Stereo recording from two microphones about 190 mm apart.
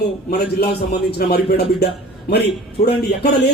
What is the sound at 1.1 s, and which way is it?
Speech, 55° left (ahead or behind).